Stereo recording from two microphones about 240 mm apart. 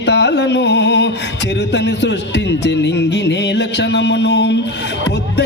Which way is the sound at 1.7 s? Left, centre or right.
Left.